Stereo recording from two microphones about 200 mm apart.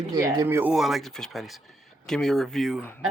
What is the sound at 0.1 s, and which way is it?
Speech, 20° right (ahead or behind).